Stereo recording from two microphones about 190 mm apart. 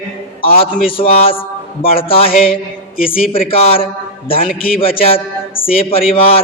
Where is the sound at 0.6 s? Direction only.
30° left (ahead or behind).